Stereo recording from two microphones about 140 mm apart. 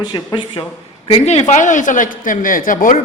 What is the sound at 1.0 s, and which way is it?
A man's voice, 45° left (ahead or behind).